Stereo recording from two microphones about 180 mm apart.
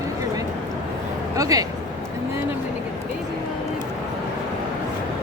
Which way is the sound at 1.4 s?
20° right (ahead or behind).